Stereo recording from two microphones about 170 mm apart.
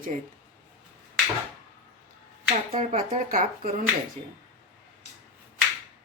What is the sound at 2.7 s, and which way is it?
Speech, 40° right (ahead or behind).